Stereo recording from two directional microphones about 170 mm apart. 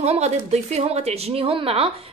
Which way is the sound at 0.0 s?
40° right (ahead or behind).